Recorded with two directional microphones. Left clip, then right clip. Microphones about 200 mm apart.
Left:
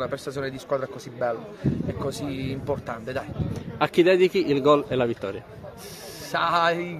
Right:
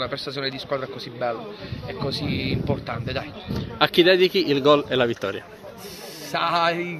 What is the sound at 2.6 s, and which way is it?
A man's voice, 10° left (ahead or behind).